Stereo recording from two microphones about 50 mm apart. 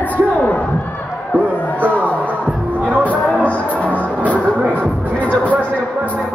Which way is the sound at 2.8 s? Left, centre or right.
Right.